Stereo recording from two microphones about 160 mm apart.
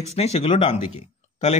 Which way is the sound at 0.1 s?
40° left (ahead or behind).